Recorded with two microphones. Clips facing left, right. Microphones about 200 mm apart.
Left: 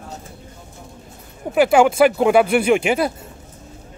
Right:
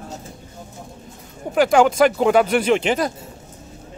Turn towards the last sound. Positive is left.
turn(degrees=10)  # may be behind; listen again after turning